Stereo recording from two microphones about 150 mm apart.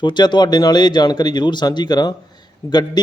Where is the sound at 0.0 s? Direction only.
30° left (ahead or behind).